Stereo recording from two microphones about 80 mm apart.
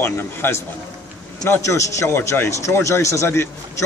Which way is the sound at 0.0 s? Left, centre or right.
Left.